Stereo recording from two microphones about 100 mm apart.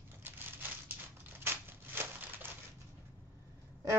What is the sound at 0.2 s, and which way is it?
Crumpling, 20° right (ahead or behind).